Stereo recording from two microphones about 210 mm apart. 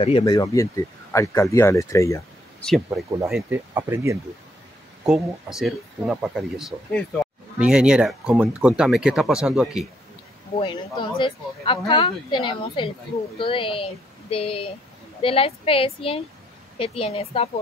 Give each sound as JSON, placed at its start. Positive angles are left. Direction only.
{"t": 0.0, "sound": "speech", "side_deg": 20}
{"t": 3.3, "sound": "speech", "side_deg": -5}
{"t": 5.0, "sound": "speech", "side_deg": 0}
{"t": 10.5, "sound": "speech", "side_deg": 25}